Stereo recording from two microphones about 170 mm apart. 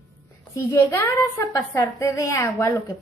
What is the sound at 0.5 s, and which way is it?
A woman's voice, 15° left (ahead or behind).